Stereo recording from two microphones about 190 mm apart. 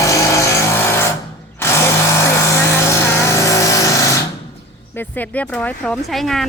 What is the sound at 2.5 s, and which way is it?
Vehicle, 15° left (ahead or behind).